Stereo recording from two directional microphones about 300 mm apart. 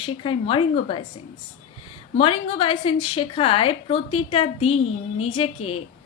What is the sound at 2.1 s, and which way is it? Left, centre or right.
A woman's voice, centre.